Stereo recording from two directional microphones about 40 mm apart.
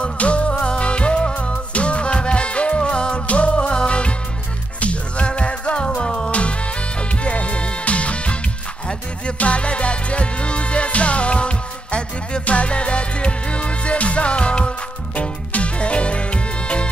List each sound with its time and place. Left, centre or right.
0.0 s music: left
9.4 s music: left